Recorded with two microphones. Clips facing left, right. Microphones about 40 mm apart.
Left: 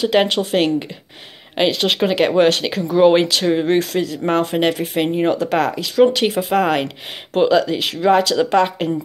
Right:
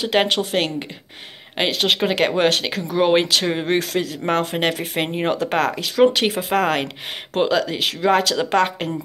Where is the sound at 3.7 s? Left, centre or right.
Centre.